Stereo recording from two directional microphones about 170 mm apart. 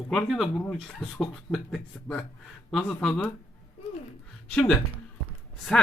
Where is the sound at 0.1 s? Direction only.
Centre (ahead or behind).